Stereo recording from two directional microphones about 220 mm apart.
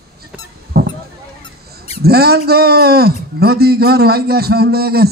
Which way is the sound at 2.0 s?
45° right (ahead or behind).